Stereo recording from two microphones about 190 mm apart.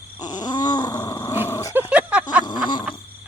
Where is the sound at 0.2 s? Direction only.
20° left (ahead or behind).